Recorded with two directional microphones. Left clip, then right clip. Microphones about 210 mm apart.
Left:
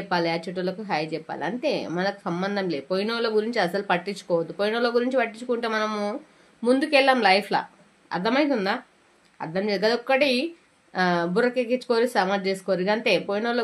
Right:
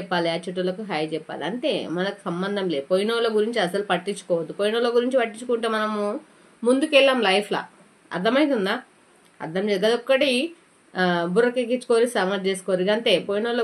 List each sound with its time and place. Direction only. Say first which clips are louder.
0.1 s speech: right 1 dB; 35° left (ahead or behind)